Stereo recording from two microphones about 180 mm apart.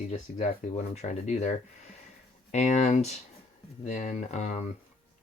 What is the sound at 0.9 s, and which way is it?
Speech, 40° left (ahead or behind).